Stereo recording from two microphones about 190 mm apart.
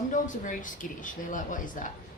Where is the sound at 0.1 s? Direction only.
45° left (ahead or behind).